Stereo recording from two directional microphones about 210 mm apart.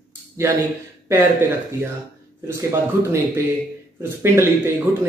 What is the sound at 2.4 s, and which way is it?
A woman's voice, 15° right (ahead or behind).